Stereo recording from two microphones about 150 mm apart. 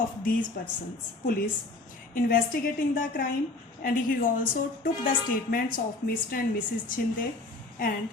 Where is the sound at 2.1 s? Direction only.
70° left (ahead or behind).